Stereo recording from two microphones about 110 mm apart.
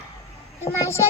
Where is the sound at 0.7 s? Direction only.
25° left (ahead or behind).